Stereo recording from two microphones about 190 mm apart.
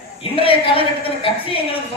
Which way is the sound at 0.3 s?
30° left (ahead or behind).